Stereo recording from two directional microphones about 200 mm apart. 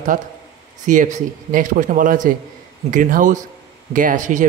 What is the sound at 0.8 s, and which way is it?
Speech, 40° right (ahead or behind).